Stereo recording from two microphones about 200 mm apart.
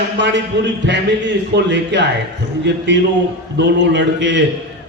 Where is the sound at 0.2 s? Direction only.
60° right (ahead or behind).